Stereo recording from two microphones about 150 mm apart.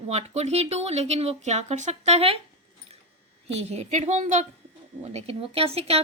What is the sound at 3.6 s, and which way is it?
Speech, 45° right (ahead or behind).